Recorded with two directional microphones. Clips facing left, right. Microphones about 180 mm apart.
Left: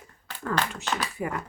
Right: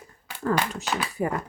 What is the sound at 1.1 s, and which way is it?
Speech, 35° right (ahead or behind).